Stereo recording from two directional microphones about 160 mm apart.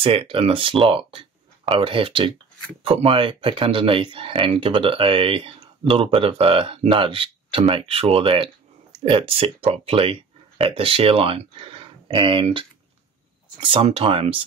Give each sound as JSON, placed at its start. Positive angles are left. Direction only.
{"t": 0.0, "sound": "speech", "side_deg": -35}